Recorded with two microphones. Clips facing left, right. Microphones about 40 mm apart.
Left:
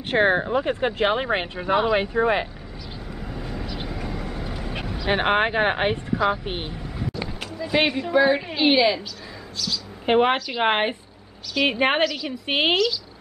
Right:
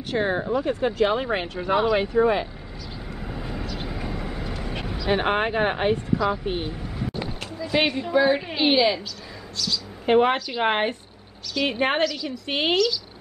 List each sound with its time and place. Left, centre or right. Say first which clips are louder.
0.1 s speech: left 4 dB; left
1.6 s speech: even; centre; by 2.4 s left
3.2 s vehicle: even; centre
3.6 s vehicle: even; centre
3.9 s vehicle: even; centre
4.9 s speech: left 2 dB; left
7.6 s speech: left 1 dB; centre
10.0 s a woman's voice: even; left
12.0 s speech: left 1 dB; centre
12.3 s speech: left 3 dB; left